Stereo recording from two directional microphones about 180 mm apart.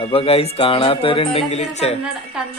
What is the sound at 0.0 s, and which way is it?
Speech, 30° left (ahead or behind).